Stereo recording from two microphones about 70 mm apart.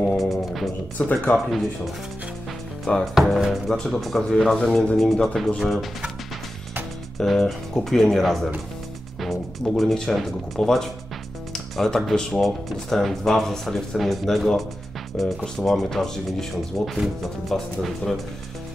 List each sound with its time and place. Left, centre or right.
0.2 s music: centre
1.0 s speech: left
2.8 s speech: centre
4.6 s speech: centre
7.2 s speech: centre